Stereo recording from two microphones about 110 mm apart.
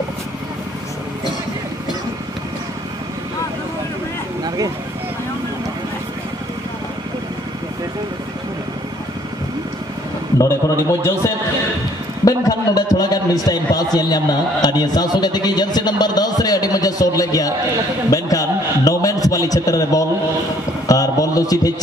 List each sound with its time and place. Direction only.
10.4 s a man's voice: 25° left (ahead or behind)
12.3 s a man's voice: 35° left (ahead or behind)